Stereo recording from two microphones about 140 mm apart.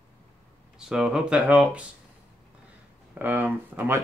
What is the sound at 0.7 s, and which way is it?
Speech, 5° right (ahead or behind).